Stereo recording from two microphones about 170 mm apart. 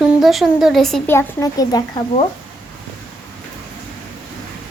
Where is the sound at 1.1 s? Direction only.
20° left (ahead or behind).